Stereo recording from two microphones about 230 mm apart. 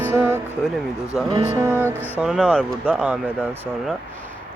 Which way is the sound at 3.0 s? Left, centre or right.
Centre.